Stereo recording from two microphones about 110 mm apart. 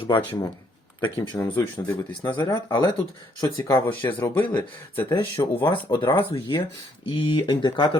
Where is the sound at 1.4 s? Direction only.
20° left (ahead or behind).